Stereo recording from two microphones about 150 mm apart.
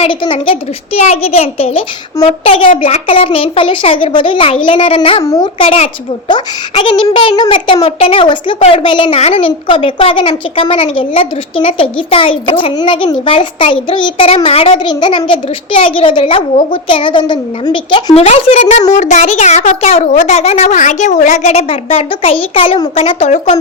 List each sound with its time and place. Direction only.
0.0 s a child's voice: 35° left (ahead or behind)
5.2 s speech: 20° left (ahead or behind)
5.5 s a child's voice: 40° left (ahead or behind)